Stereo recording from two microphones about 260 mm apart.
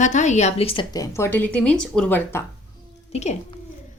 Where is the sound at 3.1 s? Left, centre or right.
Left.